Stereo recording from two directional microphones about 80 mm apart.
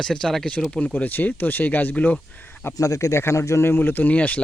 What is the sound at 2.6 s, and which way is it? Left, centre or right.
Speech, left.